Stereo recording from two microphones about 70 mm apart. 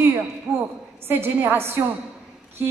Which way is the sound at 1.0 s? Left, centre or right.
Right.